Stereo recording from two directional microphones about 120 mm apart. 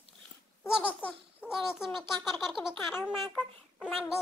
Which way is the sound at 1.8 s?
5° right (ahead or behind).